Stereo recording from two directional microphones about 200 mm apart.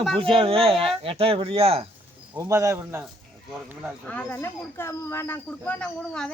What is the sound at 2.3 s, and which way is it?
Speech, 15° right (ahead or behind).